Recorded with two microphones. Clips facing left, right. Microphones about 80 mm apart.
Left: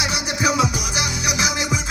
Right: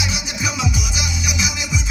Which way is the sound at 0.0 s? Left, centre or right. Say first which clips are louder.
Left 4 dB; left.